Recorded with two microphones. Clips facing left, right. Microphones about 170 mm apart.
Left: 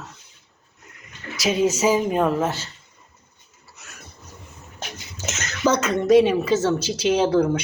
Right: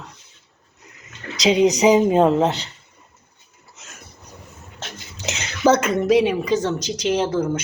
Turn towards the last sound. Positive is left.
turn(degrees=5)  # may be behind; listen again after turning